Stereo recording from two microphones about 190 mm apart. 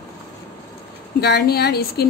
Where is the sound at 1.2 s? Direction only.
60° left (ahead or behind).